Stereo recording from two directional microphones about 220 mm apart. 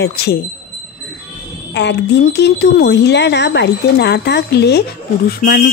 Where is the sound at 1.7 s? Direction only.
50° left (ahead or behind).